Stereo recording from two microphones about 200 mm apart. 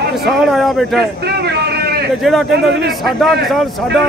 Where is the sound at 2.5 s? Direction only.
55° right (ahead or behind).